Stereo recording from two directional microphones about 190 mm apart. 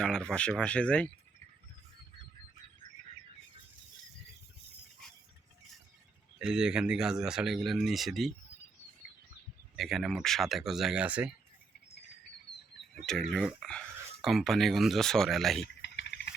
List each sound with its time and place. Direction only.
0.0 s speech: 5° left (ahead or behind)
6.4 s speech: 5° right (ahead or behind)
9.7 s speech: centre (ahead or behind)
13.0 s speech: centre (ahead or behind)
15.6 s a sound: 65° left (ahead or behind)